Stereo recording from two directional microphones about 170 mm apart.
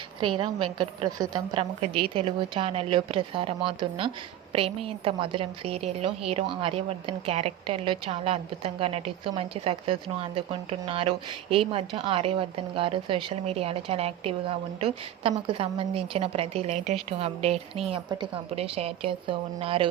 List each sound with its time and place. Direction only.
0.2 s a woman's voice: 30° right (ahead or behind)